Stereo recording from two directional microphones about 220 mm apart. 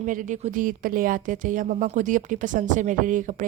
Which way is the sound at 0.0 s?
35° right (ahead or behind).